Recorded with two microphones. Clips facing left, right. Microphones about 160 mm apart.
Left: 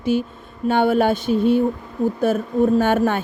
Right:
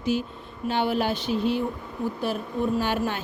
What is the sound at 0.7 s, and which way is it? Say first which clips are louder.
Speech: left 8 dB; 50° left (ahead or behind).